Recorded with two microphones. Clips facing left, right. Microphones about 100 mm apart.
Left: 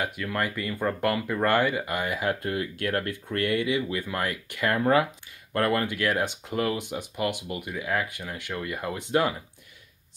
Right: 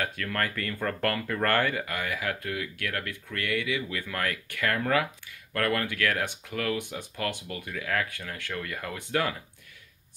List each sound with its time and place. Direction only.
0.0 s speech: 15° left (ahead or behind)